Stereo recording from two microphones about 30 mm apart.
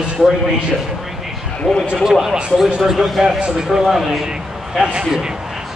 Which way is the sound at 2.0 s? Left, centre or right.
Centre.